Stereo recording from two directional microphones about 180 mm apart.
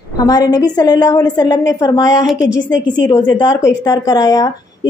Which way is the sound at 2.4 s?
85° left.